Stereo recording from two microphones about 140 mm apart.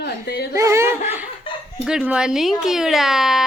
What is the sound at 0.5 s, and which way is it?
Speech, 20° right (ahead or behind).